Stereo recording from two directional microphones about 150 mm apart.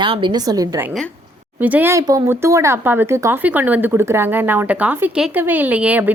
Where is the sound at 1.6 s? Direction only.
10° right (ahead or behind).